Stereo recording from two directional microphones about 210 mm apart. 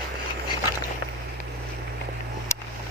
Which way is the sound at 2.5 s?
15° left (ahead or behind).